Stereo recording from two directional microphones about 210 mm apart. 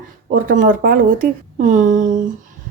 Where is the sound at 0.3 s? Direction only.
40° right (ahead or behind).